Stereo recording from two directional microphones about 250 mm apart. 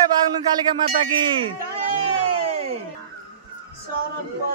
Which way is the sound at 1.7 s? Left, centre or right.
Right.